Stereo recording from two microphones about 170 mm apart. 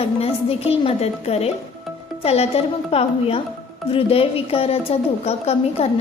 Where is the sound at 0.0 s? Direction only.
35° left (ahead or behind).